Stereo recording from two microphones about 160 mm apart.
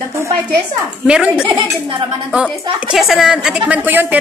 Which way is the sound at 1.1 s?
5° right (ahead or behind).